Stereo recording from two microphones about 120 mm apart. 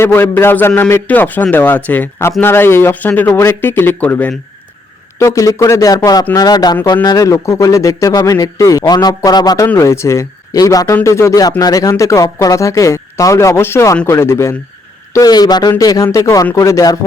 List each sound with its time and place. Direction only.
0.0 s a man's voice: 15° left (ahead or behind)
5.2 s a man's voice: 25° left (ahead or behind)
15.1 s a man's voice: 35° left (ahead or behind)